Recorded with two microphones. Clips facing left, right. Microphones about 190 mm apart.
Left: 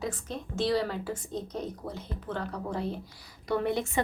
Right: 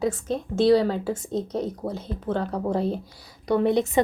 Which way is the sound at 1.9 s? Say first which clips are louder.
Right 8 dB; 25° right (ahead or behind).